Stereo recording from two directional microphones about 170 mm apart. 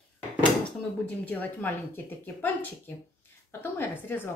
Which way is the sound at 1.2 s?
10° left (ahead or behind).